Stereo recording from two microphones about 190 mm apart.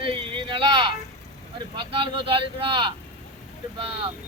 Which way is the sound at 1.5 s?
25° right (ahead or behind).